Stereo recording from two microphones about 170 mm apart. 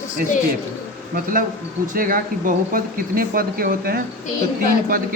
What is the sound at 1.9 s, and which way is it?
A man's voice, 55° right (ahead or behind).